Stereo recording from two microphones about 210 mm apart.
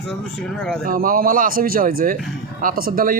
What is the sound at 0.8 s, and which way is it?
Speech, 40° right (ahead or behind).